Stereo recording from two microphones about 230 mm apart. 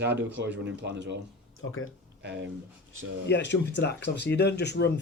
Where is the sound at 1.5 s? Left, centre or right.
Left.